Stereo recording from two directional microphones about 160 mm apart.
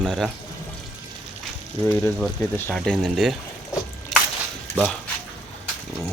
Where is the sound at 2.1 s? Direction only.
Centre (ahead or behind).